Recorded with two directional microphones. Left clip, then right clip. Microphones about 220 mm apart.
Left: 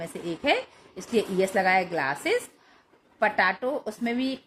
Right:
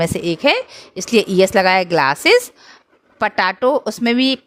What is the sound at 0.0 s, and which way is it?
Speech, 55° right (ahead or behind).